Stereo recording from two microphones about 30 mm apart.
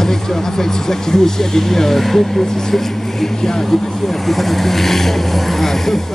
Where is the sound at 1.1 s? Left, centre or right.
Centre.